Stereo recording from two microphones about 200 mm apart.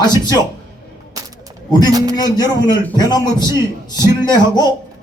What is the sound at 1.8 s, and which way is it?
Speech, 15° right (ahead or behind).